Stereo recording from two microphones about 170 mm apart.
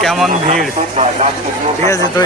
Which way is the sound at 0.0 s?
Centre (ahead or behind).